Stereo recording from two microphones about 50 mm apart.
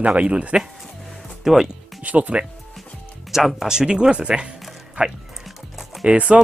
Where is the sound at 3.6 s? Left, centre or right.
Centre.